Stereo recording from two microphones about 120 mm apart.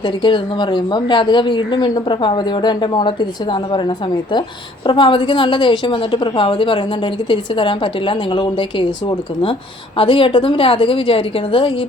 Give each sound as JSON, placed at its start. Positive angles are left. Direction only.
{"t": 0.2, "sound": "a woman's voice", "side_deg": 40}